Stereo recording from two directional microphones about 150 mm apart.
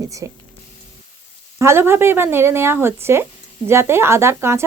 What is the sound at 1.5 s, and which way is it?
Speech, 15° right (ahead or behind).